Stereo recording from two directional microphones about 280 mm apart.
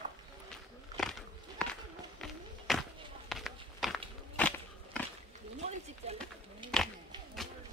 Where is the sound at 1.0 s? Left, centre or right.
Centre.